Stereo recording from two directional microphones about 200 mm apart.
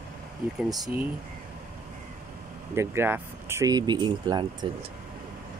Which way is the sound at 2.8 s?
10° right (ahead or behind).